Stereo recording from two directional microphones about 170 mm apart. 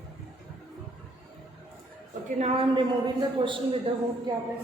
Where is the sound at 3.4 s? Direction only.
30° right (ahead or behind).